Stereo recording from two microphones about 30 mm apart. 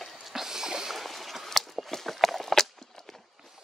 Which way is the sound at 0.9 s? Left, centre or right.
Centre.